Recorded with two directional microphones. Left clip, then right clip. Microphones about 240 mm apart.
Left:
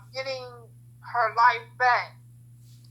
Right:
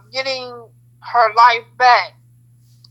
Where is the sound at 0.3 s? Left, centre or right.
Right.